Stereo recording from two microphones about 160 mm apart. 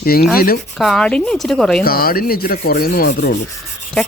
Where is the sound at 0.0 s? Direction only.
70° left (ahead or behind).